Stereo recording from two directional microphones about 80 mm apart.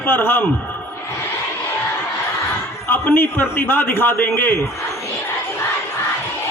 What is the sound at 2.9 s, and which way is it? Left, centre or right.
A man's voice, left.